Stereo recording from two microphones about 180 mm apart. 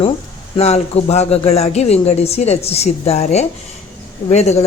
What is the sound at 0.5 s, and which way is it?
A woman's voice, 35° left (ahead or behind).